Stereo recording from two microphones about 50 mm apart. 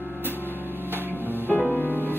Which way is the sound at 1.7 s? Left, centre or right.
Left.